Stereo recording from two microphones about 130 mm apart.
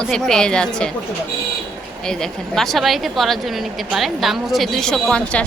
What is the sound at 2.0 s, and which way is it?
Speech, 5° left (ahead or behind).